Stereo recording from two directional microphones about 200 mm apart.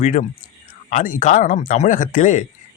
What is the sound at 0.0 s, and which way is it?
Speech, 40° left (ahead or behind).